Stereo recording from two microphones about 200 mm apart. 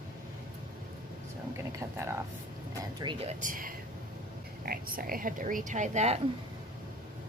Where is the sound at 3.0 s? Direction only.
25° right (ahead or behind).